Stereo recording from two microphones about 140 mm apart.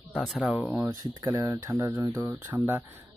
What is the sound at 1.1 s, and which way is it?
Speech, 25° right (ahead or behind).